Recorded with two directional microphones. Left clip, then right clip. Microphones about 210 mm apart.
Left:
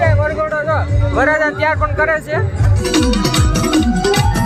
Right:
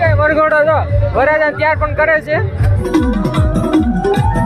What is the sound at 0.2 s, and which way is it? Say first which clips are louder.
Music: right 6 dB; 45° right (ahead or behind).